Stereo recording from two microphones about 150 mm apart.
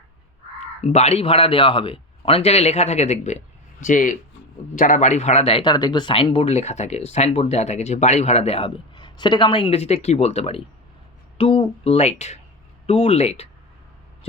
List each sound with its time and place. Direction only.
0.8 s speech: 45° left (ahead or behind)
3.8 s speech: 60° left (ahead or behind); by 13.5 s 45° left (ahead or behind)